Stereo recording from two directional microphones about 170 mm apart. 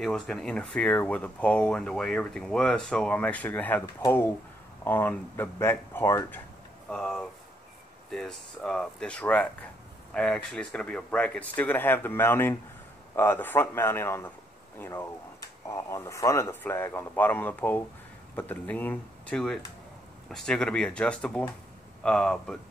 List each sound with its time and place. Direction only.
0.0 s speech: 5° left (ahead or behind)
6.9 s speech: centre (ahead or behind)